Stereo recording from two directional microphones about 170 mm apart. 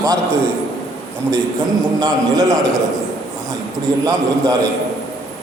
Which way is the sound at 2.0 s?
20° right (ahead or behind).